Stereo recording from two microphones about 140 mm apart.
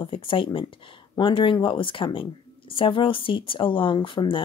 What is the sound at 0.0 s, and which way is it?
Speech, 40° left (ahead or behind).